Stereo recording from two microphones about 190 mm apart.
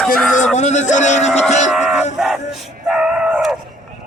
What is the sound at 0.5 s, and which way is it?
Speech, 40° left (ahead or behind).